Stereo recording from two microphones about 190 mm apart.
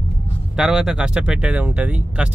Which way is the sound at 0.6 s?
5° right (ahead or behind).